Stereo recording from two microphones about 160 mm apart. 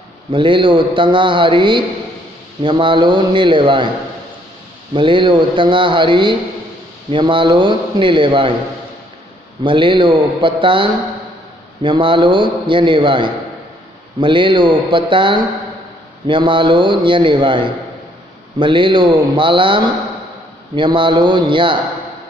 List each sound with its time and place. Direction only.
0.3 s speech: 30° right (ahead or behind)
4.9 s speech: 30° right (ahead or behind)
9.6 s speech: 30° right (ahead or behind)